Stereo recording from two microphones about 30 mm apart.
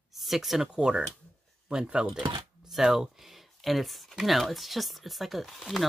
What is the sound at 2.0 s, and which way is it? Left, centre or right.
Speech, centre.